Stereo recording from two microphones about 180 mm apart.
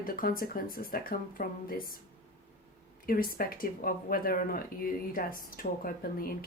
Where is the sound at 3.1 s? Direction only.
55° left (ahead or behind).